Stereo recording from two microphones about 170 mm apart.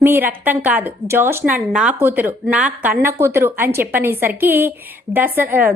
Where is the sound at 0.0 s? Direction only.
10° right (ahead or behind).